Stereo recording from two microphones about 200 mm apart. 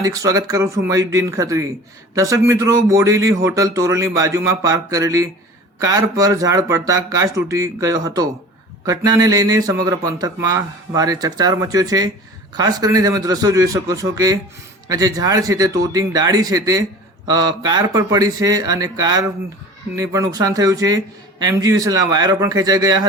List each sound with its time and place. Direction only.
0.0 s a man's voice: 15° right (ahead or behind)